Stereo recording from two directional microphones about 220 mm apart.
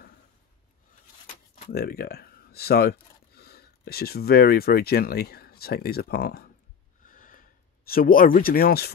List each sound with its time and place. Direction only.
1.2 s speech: 45° left (ahead or behind)
7.1 s a sound: 40° left (ahead or behind)
7.9 s speech: 40° left (ahead or behind)